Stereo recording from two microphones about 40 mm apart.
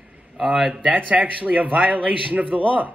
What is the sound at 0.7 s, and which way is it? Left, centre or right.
A man's voice, right.